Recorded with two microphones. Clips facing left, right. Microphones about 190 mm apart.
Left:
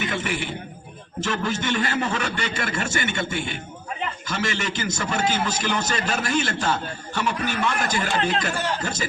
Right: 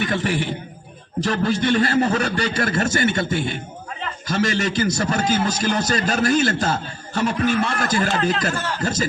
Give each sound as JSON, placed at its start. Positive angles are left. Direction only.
{"t": 0.1, "sound": "a man's voice", "side_deg": -40}